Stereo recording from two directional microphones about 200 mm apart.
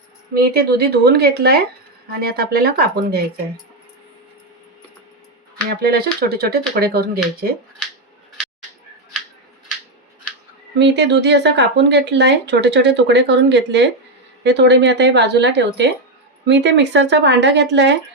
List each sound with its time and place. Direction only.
0.3 s speech: 50° right (ahead or behind)
5.6 s speech: 50° right (ahead or behind)
10.8 s speech: 60° right (ahead or behind)